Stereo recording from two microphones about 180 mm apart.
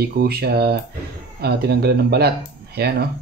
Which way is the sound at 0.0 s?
60° right (ahead or behind).